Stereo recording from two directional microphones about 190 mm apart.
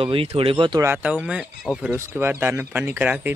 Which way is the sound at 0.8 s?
10° right (ahead or behind).